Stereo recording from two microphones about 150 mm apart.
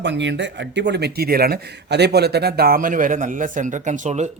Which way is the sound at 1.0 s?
90° right.